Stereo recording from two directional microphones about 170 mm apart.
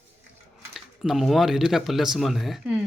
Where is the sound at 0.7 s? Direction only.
Centre (ahead or behind).